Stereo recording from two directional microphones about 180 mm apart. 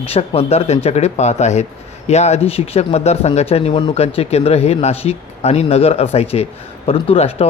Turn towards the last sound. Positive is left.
turn(degrees=35)  # may be behind; listen again after turning